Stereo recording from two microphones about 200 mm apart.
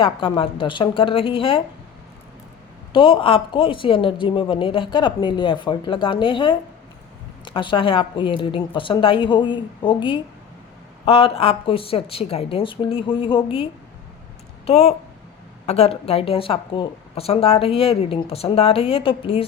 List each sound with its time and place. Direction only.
0.3 s speech: 25° left (ahead or behind)
2.9 s speech: 25° left (ahead or behind)
14.7 s speech: 30° left (ahead or behind)